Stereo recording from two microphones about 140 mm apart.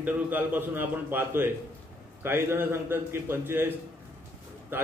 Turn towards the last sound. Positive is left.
turn(degrees=-15)  # may be behind; listen again after turning